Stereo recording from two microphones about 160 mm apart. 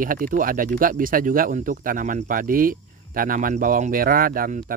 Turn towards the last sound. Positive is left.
turn(degrees=-60)  # may be behind; listen again after turning